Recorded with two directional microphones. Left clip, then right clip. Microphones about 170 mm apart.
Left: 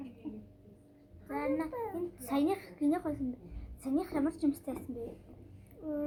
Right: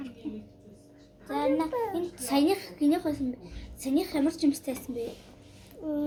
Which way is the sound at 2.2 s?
15° right (ahead or behind).